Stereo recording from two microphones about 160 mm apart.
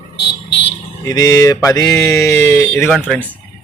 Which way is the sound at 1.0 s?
25° left (ahead or behind).